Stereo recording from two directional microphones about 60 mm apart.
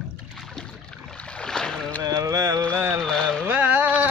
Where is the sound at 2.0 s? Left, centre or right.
Right.